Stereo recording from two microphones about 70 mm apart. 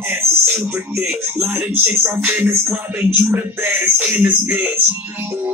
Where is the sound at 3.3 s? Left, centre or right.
Right.